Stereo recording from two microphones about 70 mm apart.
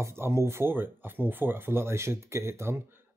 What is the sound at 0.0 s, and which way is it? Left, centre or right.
Speech, right.